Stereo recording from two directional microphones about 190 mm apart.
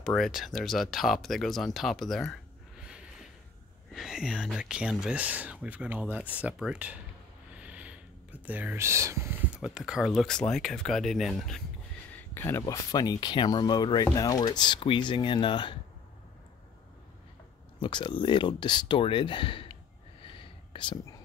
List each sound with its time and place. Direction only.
0.0 s speech: centre (ahead or behind)
3.9 s speech: centre (ahead or behind)
7.5 s whispering: 5° right (ahead or behind)
9.6 s speech: 5° right (ahead or behind); by 15.7 s 25° left (ahead or behind)
17.7 s speech: 25° left (ahead or behind)
20.2 s whispering: 25° left (ahead or behind)